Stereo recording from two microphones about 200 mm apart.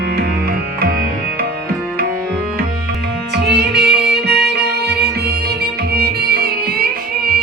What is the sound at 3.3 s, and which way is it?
Music, 60° right (ahead or behind).